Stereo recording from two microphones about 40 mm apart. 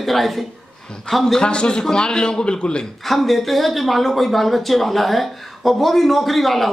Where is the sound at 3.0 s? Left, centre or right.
Centre.